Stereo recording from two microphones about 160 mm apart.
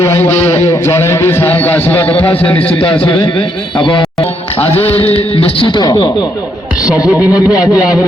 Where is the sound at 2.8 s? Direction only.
35° left (ahead or behind).